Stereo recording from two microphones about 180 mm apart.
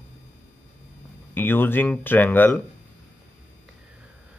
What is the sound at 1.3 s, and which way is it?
Speech, 10° left (ahead or behind).